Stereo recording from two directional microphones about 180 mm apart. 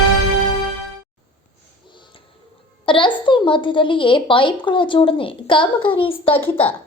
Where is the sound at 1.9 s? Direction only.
25° left (ahead or behind).